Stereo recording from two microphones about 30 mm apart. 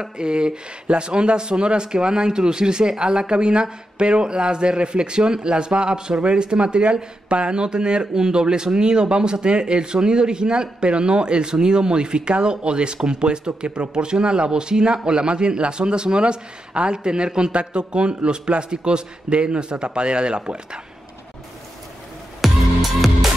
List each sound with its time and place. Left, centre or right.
0.0 s a man's voice: right
6.1 s speech: right
6.4 s a man's voice: right
22.4 s music: centre